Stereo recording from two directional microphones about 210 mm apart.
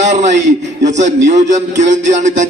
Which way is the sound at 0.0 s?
35° right (ahead or behind).